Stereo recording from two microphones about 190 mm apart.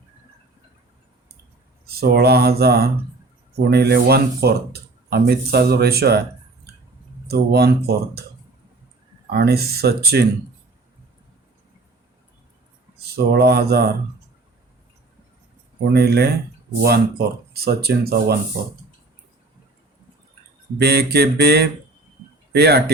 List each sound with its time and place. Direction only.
2.0 s speech: 55° right (ahead or behind)
7.3 s speech: 55° right (ahead or behind)
9.3 s speech: 55° right (ahead or behind)
13.1 s speech: 55° right (ahead or behind)
15.9 s speech: 60° right (ahead or behind)
20.7 s speech: 55° right (ahead or behind)